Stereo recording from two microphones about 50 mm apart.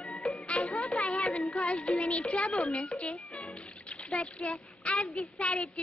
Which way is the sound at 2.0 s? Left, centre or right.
Left.